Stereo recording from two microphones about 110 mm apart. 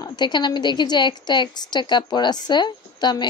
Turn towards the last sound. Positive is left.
turn(degrees=40)  # may be behind; listen again after turning